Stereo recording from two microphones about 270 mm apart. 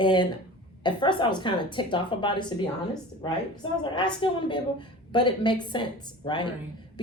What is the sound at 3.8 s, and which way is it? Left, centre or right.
A woman's voice, centre.